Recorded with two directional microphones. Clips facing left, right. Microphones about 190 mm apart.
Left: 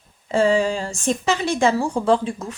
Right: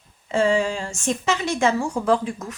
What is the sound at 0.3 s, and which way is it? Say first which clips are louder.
A woman's voice: left 2 dB; 35° left (ahead or behind).